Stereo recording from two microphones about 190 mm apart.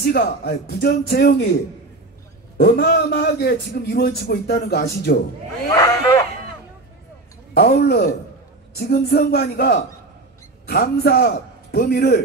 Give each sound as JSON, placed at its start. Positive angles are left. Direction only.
{"t": 0.0, "sound": "a man's voice", "side_deg": 55}
{"t": 2.5, "sound": "a man's voice", "side_deg": 55}
{"t": 5.8, "sound": "speech", "side_deg": 15}
{"t": 7.5, "sound": "a man's voice", "side_deg": 60}